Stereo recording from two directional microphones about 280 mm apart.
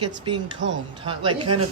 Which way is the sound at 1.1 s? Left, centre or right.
Centre.